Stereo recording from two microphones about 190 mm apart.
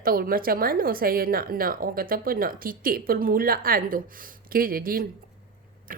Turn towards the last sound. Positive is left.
turn(degrees=-50)  # may be behind; listen again after turning